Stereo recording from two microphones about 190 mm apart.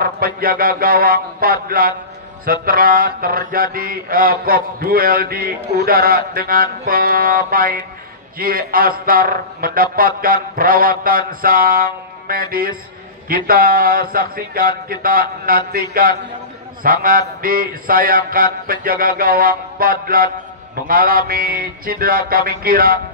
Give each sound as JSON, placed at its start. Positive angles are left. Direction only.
{"t": 0.0, "sound": "mantra", "side_deg": -50}